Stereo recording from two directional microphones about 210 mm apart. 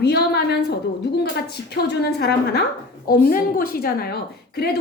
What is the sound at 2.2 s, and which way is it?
A woman's voice, 50° left (ahead or behind).